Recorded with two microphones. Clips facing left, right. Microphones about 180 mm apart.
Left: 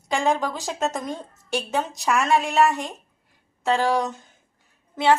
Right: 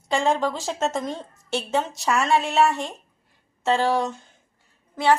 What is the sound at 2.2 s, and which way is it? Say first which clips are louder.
Speech: even; 15° left (ahead or behind).